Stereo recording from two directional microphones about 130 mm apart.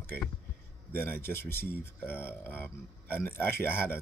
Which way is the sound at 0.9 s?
15° left (ahead or behind).